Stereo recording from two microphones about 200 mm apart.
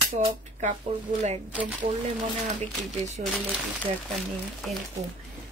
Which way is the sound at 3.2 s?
40° right (ahead or behind).